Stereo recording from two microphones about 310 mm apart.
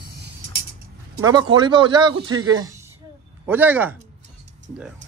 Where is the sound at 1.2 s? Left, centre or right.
Centre.